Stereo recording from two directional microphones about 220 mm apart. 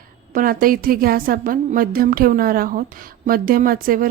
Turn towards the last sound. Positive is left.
turn(degrees=-40)  # may be behind; listen again after turning